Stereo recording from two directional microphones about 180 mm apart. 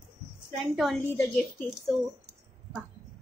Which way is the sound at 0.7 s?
Centre (ahead or behind).